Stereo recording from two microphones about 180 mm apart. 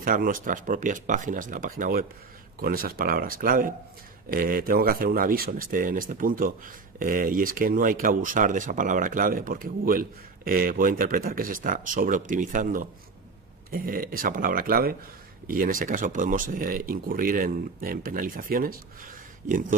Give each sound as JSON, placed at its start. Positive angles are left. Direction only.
{"t": 0.0, "sound": "speech", "side_deg": -50}